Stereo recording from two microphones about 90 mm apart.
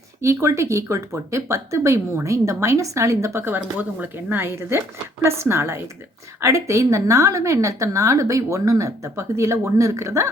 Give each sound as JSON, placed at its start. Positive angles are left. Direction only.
{"t": 0.2, "sound": "a woman's voice", "side_deg": -30}